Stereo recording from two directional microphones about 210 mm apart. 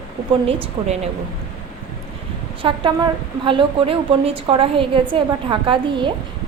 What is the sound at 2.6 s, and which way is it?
A woman's voice, 25° right (ahead or behind).